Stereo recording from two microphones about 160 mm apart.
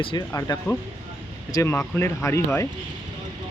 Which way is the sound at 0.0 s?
30° left (ahead or behind).